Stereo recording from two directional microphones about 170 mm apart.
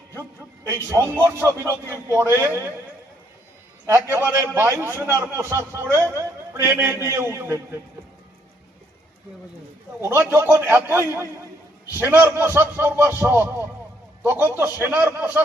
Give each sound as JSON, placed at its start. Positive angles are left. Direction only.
{"t": 0.7, "sound": "a man's voice", "side_deg": -20}
{"t": 3.8, "sound": "a man's voice", "side_deg": -15}
{"t": 10.0, "sound": "a man's voice", "side_deg": -15}